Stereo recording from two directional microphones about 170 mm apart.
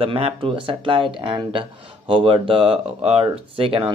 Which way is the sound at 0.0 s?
30° right (ahead or behind).